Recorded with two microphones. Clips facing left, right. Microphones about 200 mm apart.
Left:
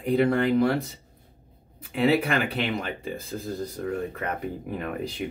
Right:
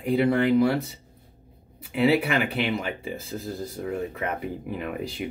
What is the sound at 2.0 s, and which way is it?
Speech, 5° right (ahead or behind).